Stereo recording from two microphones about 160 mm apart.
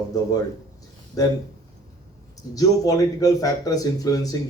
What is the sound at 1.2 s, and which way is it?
Speech, 20° left (ahead or behind).